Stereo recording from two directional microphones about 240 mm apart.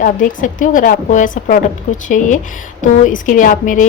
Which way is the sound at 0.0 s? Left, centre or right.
Left.